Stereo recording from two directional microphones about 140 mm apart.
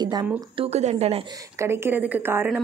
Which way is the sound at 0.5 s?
45° right (ahead or behind).